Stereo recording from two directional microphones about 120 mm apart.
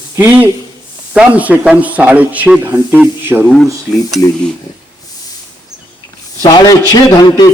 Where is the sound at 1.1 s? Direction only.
10° right (ahead or behind).